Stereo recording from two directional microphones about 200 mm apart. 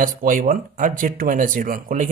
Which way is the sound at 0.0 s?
45° right (ahead or behind).